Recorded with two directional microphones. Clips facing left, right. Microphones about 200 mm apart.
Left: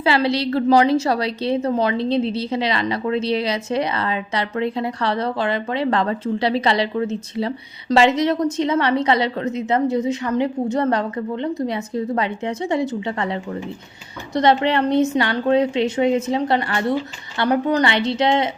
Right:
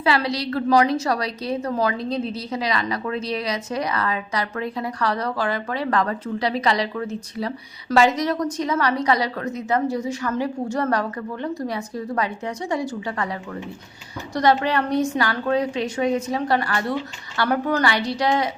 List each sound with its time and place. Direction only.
0.0 s a woman's voice: 25° left (ahead or behind)